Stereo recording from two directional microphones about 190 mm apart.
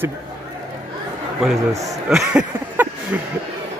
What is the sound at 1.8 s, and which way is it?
Speech, centre (ahead or behind).